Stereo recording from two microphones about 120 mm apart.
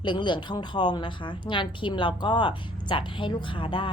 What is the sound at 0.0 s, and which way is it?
A woman's voice, 40° left (ahead or behind).